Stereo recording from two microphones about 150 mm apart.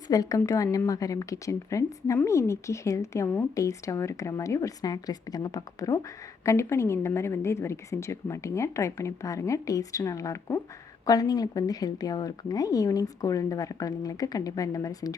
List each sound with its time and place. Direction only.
0.1 s a woman's voice: 25° left (ahead or behind)